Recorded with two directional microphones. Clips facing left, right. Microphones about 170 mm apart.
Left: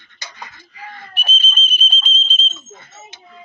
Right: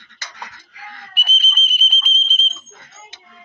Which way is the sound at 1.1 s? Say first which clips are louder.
Left 1 dB; 10° right (ahead or behind).